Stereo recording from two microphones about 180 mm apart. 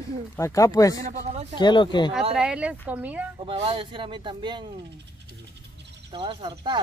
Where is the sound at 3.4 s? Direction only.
30° right (ahead or behind).